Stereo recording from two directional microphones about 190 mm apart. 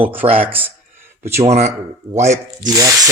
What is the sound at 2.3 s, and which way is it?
Speech, 20° right (ahead or behind).